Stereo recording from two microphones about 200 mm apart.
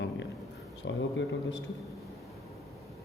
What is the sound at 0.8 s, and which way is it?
Speech, 65° left (ahead or behind).